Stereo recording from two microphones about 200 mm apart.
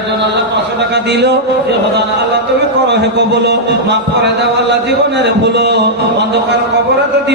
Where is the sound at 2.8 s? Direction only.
60° right (ahead or behind).